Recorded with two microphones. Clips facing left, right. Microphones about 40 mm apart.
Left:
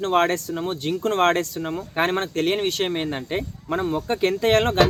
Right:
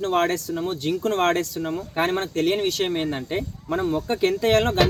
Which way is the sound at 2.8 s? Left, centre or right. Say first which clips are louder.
Even; left.